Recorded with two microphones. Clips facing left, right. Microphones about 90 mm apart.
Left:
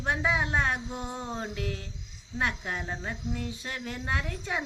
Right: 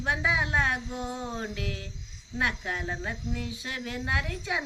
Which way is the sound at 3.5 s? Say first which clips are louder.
Right 1 dB; 30° left (ahead or behind).